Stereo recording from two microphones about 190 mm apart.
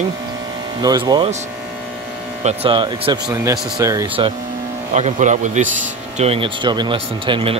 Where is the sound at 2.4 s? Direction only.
25° right (ahead or behind).